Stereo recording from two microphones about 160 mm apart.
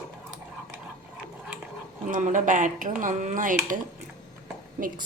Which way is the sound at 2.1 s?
55° right (ahead or behind).